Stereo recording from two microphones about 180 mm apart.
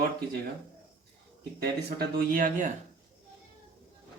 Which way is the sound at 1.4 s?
60° right (ahead or behind).